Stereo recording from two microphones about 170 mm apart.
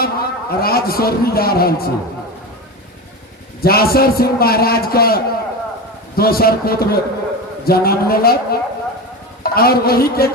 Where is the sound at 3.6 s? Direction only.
60° left (ahead or behind).